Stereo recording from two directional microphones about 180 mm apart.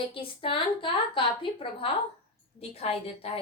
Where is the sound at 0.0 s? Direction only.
30° left (ahead or behind).